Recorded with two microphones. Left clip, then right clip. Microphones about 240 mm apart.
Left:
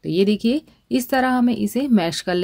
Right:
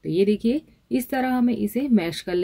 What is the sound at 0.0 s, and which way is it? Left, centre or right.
A woman's voice, left.